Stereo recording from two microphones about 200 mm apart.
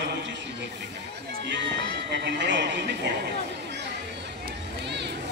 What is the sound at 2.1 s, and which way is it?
Speech, 60° right (ahead or behind).